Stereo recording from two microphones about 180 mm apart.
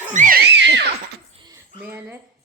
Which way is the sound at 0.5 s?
75° right (ahead or behind).